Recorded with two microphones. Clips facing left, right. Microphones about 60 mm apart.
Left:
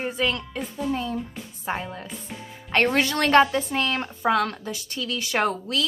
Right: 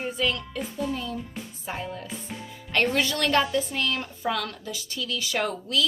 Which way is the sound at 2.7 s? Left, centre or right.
Left.